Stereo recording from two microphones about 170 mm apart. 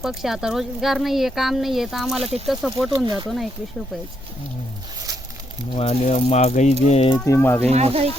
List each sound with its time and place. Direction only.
0.0 s speech: centre (ahead or behind)
2.9 s speech: 25° right (ahead or behind)
3.2 s speech: centre (ahead or behind)
5.7 s speech: 35° left (ahead or behind)
7.3 s speech: 15° left (ahead or behind)
7.7 s speech: 35° right (ahead or behind)